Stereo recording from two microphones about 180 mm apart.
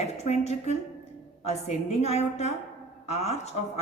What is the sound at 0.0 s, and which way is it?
A woman's voice, 35° left (ahead or behind).